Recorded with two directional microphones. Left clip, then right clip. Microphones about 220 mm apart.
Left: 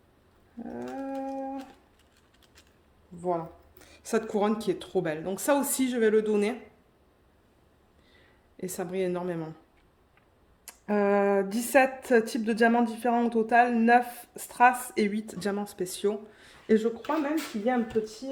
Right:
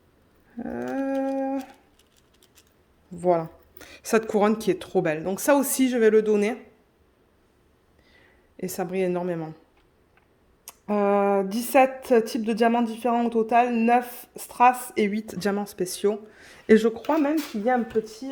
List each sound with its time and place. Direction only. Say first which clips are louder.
0.6 s dog: right 7 dB; 45° right (ahead or behind)
3.2 s speech: right 8 dB; 50° right (ahead or behind); by 6.6 s 25° right (ahead or behind)
8.5 s speech: right 4 dB; 25° right (ahead or behind)
10.8 s a woman's voice: right 3 dB; 15° right (ahead or behind)
15.3 s speech: right 5 dB; 30° right (ahead or behind)
16.6 s speech: right 6 dB; 45° right (ahead or behind)